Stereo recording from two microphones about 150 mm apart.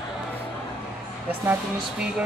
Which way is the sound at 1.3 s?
10° right (ahead or behind).